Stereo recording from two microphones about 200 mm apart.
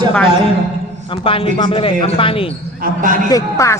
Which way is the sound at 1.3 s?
25° left (ahead or behind).